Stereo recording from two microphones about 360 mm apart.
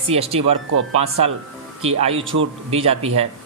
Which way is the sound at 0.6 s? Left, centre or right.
Right.